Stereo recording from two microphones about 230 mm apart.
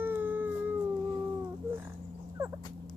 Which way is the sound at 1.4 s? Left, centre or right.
Centre.